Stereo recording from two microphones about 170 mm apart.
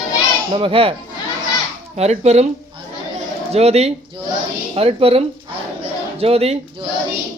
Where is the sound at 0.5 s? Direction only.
30° right (ahead or behind).